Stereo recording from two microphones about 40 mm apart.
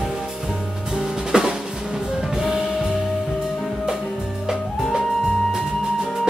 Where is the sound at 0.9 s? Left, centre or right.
Centre.